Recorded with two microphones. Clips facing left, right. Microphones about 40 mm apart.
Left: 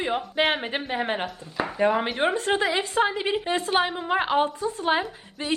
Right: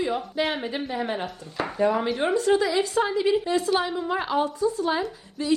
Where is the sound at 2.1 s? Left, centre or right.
Left.